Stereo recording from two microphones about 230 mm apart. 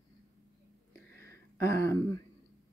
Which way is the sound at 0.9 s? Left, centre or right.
Centre.